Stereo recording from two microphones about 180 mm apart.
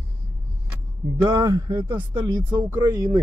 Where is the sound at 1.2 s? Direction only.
15° right (ahead or behind).